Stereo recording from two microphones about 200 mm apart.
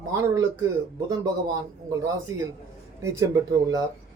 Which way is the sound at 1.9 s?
15° right (ahead or behind).